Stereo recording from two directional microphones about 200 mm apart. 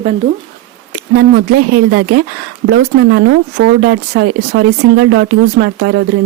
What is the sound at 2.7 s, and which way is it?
Speech, 60° right (ahead or behind).